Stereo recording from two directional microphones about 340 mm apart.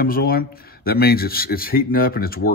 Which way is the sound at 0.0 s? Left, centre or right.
Left.